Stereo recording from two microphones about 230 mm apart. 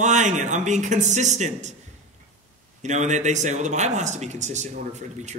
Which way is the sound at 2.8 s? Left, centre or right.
Right.